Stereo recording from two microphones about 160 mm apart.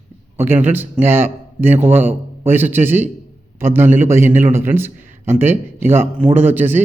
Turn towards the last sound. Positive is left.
turn(degrees=-10)  # may be behind; listen again after turning